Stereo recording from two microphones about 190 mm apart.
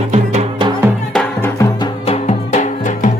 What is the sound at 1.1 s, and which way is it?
Music, 5° left (ahead or behind).